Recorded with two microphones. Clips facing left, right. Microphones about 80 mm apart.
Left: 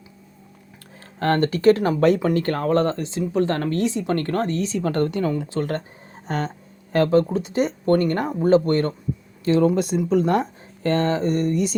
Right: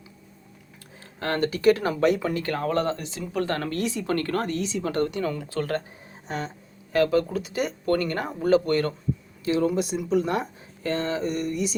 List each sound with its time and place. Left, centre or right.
1.2 s speech: left
5.3 s speech: left
6.2 s speech: left
6.9 s speech: left
9.4 s a sound: left
10.0 s speech: left
10.8 s a sound: left